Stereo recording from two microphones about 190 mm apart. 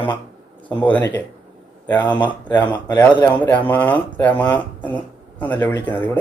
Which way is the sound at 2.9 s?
25° left (ahead or behind).